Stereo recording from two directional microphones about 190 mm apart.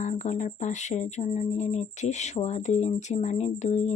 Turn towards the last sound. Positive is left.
turn(degrees=35)  # may be behind; listen again after turning